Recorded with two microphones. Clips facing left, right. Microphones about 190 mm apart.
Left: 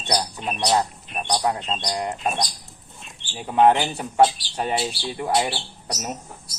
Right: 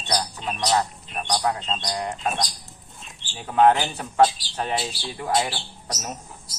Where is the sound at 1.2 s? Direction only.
20° left (ahead or behind).